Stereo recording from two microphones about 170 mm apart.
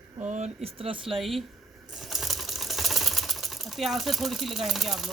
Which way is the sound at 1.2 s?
Centre (ahead or behind).